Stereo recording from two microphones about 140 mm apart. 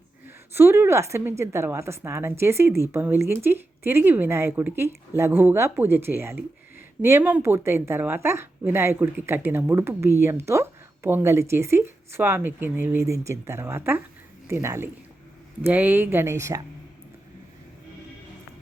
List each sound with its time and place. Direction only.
0.5 s a woman's voice: 15° right (ahead or behind)